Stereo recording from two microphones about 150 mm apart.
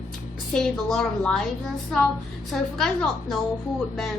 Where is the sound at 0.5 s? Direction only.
5° left (ahead or behind).